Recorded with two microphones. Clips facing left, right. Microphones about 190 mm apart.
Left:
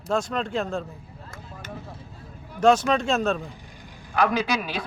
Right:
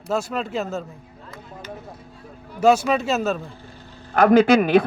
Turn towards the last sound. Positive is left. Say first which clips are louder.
# right 12 dB
turn(degrees=-55)  # may be behind; listen again after turning